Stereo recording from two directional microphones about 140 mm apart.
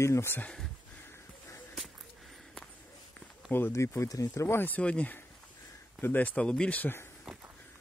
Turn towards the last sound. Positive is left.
turn(degrees=15)  # may be behind; listen again after turning